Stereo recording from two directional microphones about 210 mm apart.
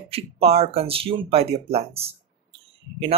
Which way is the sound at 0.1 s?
30° right (ahead or behind).